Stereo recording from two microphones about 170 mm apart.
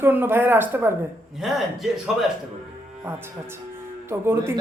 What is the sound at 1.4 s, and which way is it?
Speech, centre (ahead or behind).